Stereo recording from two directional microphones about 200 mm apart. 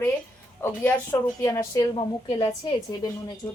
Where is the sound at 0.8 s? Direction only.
10° left (ahead or behind).